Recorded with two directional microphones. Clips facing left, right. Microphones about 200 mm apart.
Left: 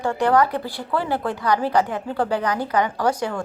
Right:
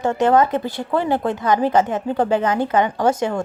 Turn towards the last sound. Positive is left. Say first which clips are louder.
# right 4 dB
turn(degrees=-25)  # may be behind; listen again after turning